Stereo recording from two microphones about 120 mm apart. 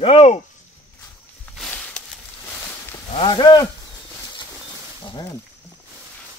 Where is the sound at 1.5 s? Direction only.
5° left (ahead or behind).